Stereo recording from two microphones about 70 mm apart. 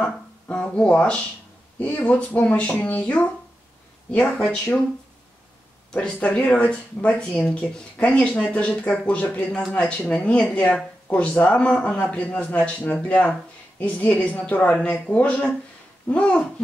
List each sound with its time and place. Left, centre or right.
0.0 s a woman's voice: centre
5.9 s a woman's voice: centre